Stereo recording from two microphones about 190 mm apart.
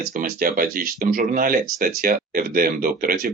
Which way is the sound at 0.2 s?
45° right (ahead or behind).